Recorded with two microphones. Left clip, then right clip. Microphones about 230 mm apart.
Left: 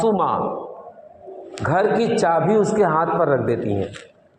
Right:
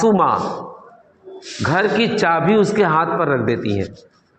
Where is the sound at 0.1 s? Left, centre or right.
Right.